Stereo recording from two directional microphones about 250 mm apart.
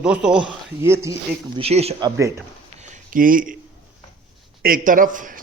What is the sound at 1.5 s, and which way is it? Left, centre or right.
Speech, right.